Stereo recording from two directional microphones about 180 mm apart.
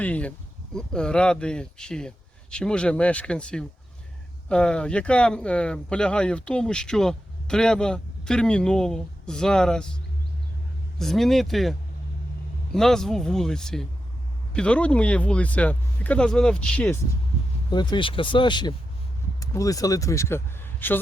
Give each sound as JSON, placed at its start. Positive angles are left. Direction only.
{"t": 0.0, "sound": "speech", "side_deg": 10}
{"t": 10.9, "sound": "speech", "side_deg": 0}
{"t": 17.7, "sound": "speech", "side_deg": 25}